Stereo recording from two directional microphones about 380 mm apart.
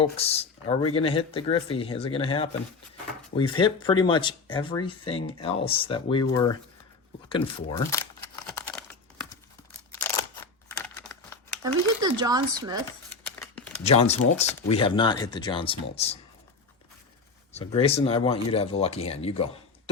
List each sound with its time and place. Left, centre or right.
0.0 s speech: centre
8.4 s crumpling: centre
9.9 s a sound: centre
11.6 s speech: centre
13.1 s a sound: centre
13.8 s speech: centre
17.5 s speech: centre